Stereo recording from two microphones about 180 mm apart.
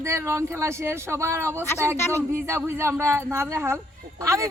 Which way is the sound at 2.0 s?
15° left (ahead or behind).